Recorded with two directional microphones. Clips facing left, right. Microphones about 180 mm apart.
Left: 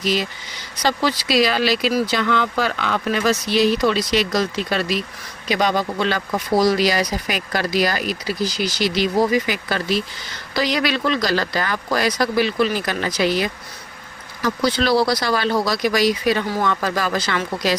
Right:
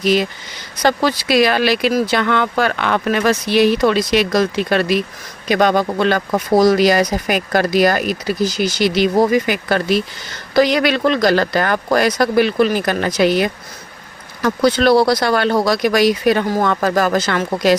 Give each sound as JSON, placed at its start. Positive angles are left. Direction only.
{"t": 0.0, "sound": "speech", "side_deg": -55}